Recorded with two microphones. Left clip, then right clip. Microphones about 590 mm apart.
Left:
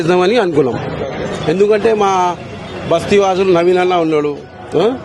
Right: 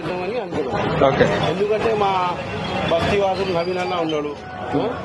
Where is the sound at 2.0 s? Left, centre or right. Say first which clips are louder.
Left 6 dB; left.